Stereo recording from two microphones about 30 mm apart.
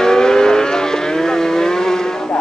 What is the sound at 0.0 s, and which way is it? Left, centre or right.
Vehicle, left.